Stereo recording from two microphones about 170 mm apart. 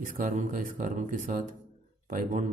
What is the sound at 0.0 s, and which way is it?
Speech, 50° right (ahead or behind).